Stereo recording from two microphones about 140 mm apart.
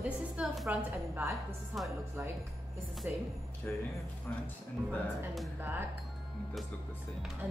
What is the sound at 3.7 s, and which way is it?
Speech, 15° left (ahead or behind).